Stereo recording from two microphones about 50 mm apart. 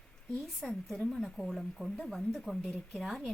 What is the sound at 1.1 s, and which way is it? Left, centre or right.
A woman's voice, centre.